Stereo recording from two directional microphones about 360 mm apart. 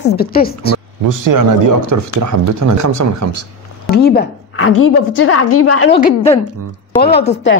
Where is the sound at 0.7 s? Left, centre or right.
Right.